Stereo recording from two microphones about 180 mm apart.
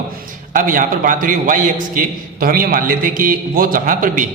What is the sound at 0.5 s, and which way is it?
A man's voice, 50° right (ahead or behind).